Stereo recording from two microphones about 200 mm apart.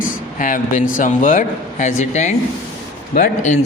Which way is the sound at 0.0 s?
40° left (ahead or behind).